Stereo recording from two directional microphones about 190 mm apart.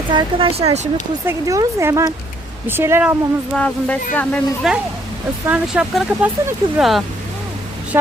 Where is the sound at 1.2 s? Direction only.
15° right (ahead or behind).